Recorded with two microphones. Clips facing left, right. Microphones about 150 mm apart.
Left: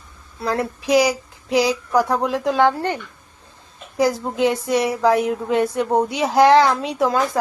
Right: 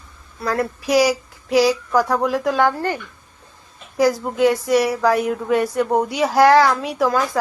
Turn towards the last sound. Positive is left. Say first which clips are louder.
# even
turn(degrees=25)  # may be behind; listen again after turning